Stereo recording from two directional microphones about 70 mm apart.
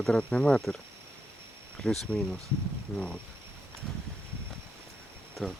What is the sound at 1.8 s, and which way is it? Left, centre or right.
Speech, centre.